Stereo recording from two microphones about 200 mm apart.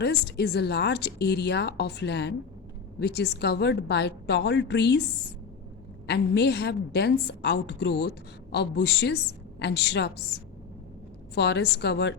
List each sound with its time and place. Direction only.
0.0 s speech: 55° left (ahead or behind)
6.1 s speech: 60° left (ahead or behind)